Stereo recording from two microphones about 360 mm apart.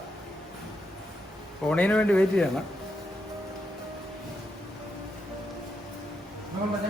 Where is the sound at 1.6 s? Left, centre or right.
Centre.